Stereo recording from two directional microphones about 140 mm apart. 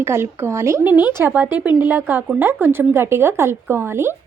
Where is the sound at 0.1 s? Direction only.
20° right (ahead or behind).